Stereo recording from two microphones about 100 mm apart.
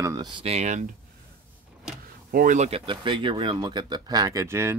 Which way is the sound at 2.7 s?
55° right (ahead or behind).